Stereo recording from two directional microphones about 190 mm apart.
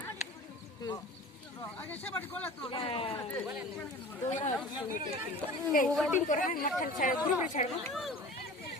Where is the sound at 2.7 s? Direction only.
30° left (ahead or behind).